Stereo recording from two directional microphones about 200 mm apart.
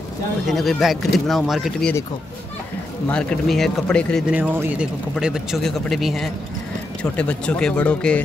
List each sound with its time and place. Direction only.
0.5 s speech: centre (ahead or behind)
3.1 s speech: 5° left (ahead or behind)